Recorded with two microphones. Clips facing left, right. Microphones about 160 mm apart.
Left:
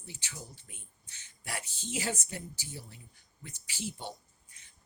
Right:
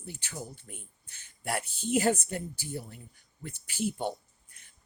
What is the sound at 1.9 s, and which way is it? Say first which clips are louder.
Speech: right 10 dB; 55° right (ahead or behind).